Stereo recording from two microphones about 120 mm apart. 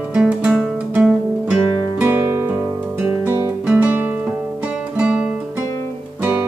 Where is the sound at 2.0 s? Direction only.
20° right (ahead or behind).